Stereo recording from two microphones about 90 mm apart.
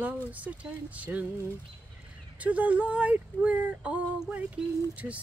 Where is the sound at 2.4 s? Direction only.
15° right (ahead or behind).